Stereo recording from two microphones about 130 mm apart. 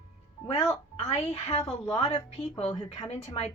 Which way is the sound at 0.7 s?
55° left (ahead or behind).